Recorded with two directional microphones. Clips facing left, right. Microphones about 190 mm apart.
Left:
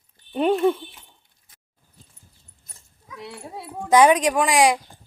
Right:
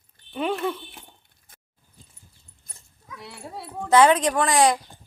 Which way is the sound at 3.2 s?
15° left (ahead or behind).